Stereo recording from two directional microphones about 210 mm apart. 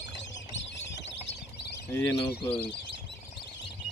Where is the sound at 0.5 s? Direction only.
55° left (ahead or behind).